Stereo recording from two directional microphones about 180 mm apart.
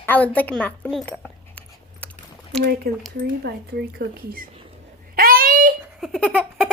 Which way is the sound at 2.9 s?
60° right (ahead or behind).